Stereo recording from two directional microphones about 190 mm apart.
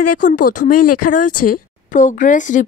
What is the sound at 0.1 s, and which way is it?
Speech, 45° left (ahead or behind).